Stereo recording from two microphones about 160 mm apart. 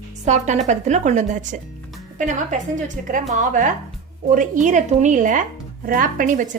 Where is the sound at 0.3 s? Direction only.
45° right (ahead or behind).